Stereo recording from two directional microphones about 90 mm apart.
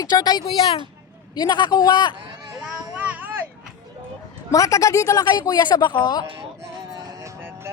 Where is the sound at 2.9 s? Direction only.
20° right (ahead or behind).